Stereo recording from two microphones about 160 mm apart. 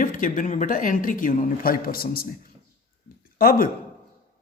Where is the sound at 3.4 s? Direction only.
65° left (ahead or behind).